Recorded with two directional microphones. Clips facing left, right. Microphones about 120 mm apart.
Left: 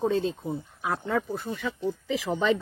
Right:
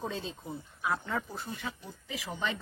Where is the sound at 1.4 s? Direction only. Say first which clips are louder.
Left 10 dB; 90° left.